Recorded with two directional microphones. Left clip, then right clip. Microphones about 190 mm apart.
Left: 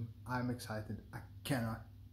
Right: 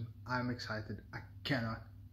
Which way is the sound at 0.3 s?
10° left (ahead or behind).